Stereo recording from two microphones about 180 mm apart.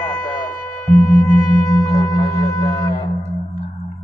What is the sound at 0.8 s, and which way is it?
Sine wave, 15° left (ahead or behind).